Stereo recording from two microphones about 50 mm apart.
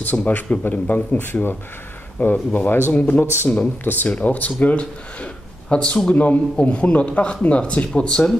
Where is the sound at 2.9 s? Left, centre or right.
Left.